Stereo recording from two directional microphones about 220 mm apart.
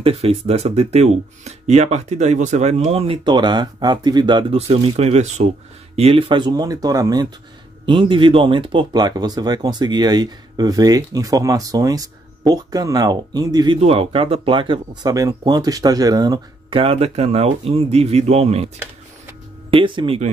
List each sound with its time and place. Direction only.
0.0 s speech: 25° right (ahead or behind)
19.7 s speech: 20° right (ahead or behind)